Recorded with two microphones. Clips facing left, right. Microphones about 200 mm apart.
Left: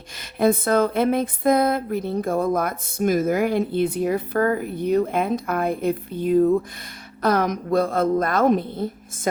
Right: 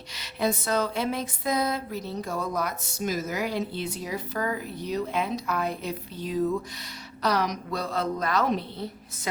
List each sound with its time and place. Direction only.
0.2 s speech: 50° left (ahead or behind)